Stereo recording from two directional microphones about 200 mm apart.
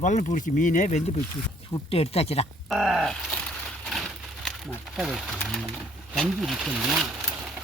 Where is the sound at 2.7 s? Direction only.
Centre (ahead or behind).